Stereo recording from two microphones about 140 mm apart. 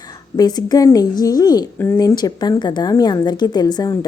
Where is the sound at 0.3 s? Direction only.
30° left (ahead or behind).